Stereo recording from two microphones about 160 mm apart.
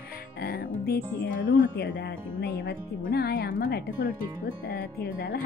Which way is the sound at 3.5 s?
55° left (ahead or behind).